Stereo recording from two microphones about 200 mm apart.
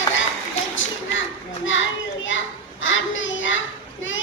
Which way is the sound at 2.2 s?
70° left (ahead or behind).